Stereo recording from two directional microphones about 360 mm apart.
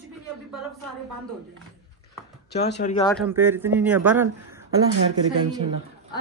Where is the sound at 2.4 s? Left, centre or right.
Left.